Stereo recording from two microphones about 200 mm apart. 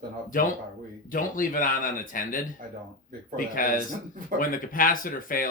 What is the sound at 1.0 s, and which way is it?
Speech, 40° left (ahead or behind).